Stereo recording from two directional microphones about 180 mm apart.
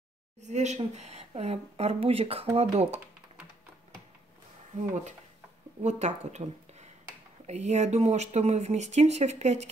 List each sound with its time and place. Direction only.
0.4 s speech: 40° right (ahead or behind)
5.8 s speech: 40° right (ahead or behind)